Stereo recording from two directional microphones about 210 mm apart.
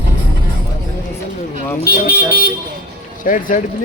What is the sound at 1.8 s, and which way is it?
Speech, 45° left (ahead or behind).